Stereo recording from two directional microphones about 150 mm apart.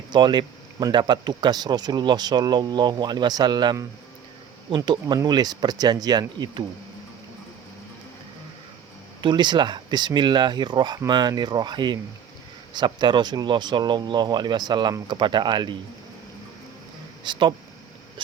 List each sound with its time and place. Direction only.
0.1 s speech: 30° right (ahead or behind)
9.2 s speech: 30° right (ahead or behind)
17.2 s speech: 30° right (ahead or behind)